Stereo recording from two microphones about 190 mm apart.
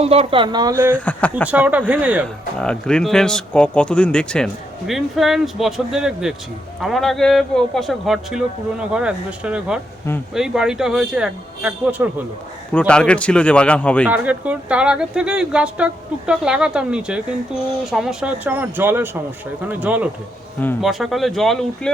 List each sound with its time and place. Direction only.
0.0 s speech: 30° right (ahead or behind); by 0.9 s 10° right (ahead or behind)
0.9 s speech: 10° left (ahead or behind)
1.5 s speech: 10° right (ahead or behind)
2.2 s speech: 5° left (ahead or behind)
12.7 s speech: 5° left (ahead or behind)
14.1 s speech: 10° right (ahead or behind)